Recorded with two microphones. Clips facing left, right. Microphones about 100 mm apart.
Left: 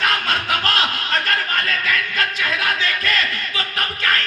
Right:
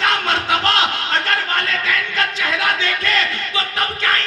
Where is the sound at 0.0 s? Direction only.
25° right (ahead or behind).